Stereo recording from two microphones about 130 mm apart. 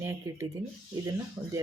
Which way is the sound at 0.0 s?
20° right (ahead or behind).